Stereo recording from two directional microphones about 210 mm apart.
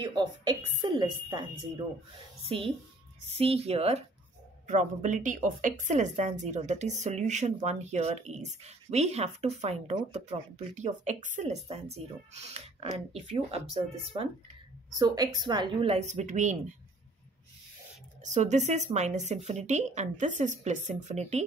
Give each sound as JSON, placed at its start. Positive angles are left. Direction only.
{"t": 0.0, "sound": "a woman's voice", "side_deg": -20}
{"t": 15.0, "sound": "speech", "side_deg": -20}
{"t": 18.2, "sound": "a woman's voice", "side_deg": -35}